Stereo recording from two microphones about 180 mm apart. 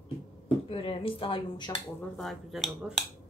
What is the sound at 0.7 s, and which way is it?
Speech, 30° left (ahead or behind).